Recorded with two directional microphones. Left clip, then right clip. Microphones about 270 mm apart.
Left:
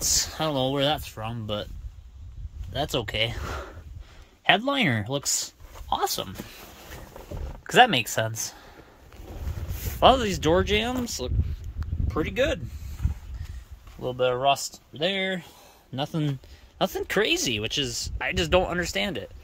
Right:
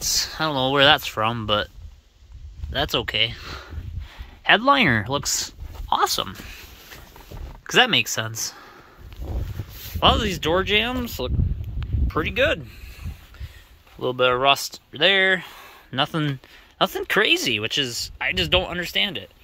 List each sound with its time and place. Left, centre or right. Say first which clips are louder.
0.0 s speech: right 3 dB; centre
2.7 s speech: right 5 dB; centre
4.5 s speech: right 6 dB; centre
7.6 s speech: right 1 dB; centre
9.9 s speech: even; centre
12.1 s speech: right 4 dB; centre
14.0 s speech: right 5 dB; right
14.5 s speech: right 5 dB; centre